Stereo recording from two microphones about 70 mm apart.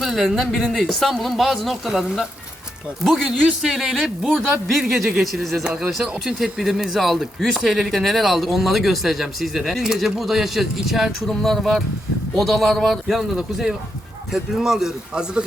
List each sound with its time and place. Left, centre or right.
0.0 s speech: centre